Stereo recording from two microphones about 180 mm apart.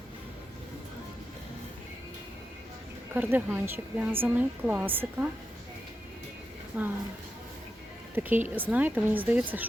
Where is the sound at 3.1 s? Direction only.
10° right (ahead or behind).